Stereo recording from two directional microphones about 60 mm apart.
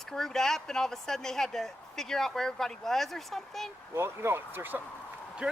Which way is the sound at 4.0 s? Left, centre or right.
Right.